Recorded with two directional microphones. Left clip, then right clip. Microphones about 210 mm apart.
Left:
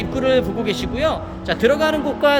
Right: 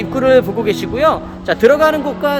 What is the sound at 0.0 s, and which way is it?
Music, 15° right (ahead or behind).